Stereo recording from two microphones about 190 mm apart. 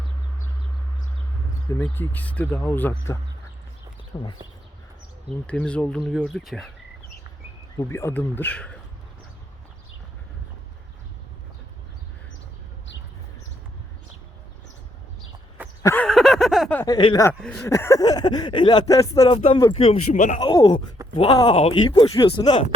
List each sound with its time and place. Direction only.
1.7 s speech: 10° left (ahead or behind)
5.5 s speech: 5° left (ahead or behind)
7.8 s speech: 15° left (ahead or behind)
15.8 s a sound: 15° left (ahead or behind)
16.0 s a sound: centre (ahead or behind)
16.8 s speech: 25° left (ahead or behind)
17.2 s speech: 10° left (ahead or behind)
19.2 s speech: 30° left (ahead or behind)
20.4 s speech: 25° left (ahead or behind)